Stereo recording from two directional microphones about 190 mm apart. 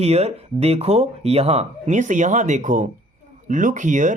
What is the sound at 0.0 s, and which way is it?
Speech, 35° right (ahead or behind).